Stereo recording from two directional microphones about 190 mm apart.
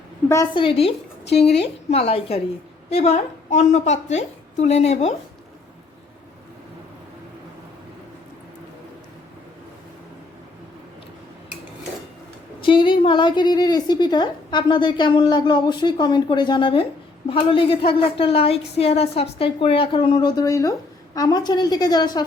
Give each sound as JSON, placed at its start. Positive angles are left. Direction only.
{"t": 0.3, "sound": "a woman's voice", "side_deg": 15}
{"t": 0.6, "sound": "a woman's voice", "side_deg": 30}
{"t": 1.2, "sound": "a woman's voice", "side_deg": 60}
{"t": 1.9, "sound": "a woman's voice", "side_deg": 30}
{"t": 12.6, "sound": "a woman's voice", "side_deg": 25}